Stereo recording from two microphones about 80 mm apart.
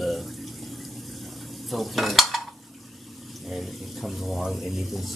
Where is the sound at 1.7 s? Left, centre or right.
Centre.